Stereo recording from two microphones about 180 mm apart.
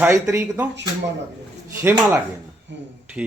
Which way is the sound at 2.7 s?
80° right.